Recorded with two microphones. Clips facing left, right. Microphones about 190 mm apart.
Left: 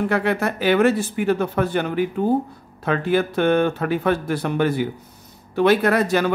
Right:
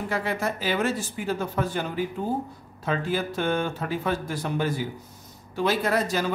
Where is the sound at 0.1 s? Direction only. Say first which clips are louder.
Left 6 dB; 65° left (ahead or behind).